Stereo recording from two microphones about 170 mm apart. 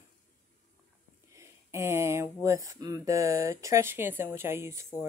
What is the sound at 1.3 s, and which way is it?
Speech, 15° right (ahead or behind).